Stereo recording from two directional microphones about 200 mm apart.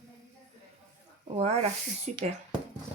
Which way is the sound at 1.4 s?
30° right (ahead or behind).